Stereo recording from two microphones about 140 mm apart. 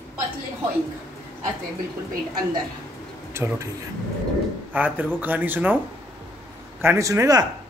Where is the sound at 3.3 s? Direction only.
20° right (ahead or behind).